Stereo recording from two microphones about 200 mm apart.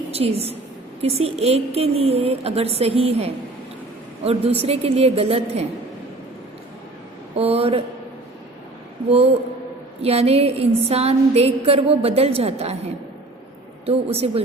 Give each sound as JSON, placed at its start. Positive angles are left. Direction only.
{"t": 0.1, "sound": "a woman's voice", "side_deg": -30}
{"t": 1.0, "sound": "a sound", "side_deg": -30}
{"t": 4.2, "sound": "a woman's voice", "side_deg": -30}
{"t": 7.3, "sound": "a woman's voice", "side_deg": -30}
{"t": 9.0, "sound": "a woman's voice", "side_deg": -30}
{"t": 10.0, "sound": "a sound", "side_deg": -30}
{"t": 13.8, "sound": "a woman's voice", "side_deg": -30}